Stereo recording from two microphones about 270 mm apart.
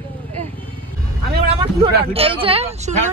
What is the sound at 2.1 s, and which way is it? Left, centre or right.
Speech, centre.